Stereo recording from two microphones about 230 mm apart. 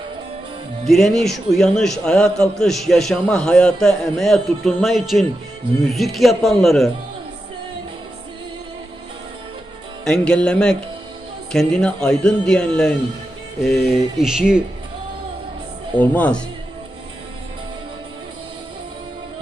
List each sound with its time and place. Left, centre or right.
0.9 s a man's voice: centre
10.0 s a man's voice: centre
16.0 s speech: centre